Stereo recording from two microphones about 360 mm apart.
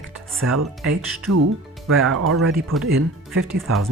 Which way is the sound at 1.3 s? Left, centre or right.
Right.